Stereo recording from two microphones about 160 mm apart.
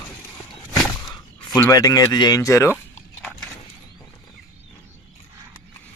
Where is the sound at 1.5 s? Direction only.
20° left (ahead or behind).